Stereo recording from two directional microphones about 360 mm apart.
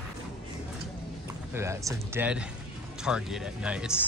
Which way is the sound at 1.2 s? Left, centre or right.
Centre.